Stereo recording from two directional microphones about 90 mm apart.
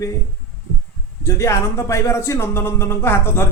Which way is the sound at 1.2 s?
35° left (ahead or behind).